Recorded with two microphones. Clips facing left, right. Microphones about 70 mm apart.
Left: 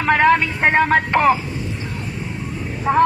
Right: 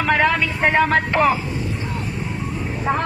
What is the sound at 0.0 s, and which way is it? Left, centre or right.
Speech, left.